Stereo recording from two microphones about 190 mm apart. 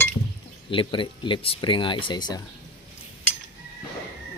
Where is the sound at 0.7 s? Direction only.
25° left (ahead or behind).